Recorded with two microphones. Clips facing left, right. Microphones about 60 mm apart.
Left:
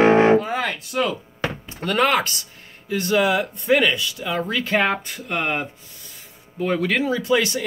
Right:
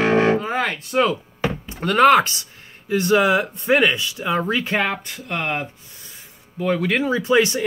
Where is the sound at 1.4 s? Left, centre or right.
Centre.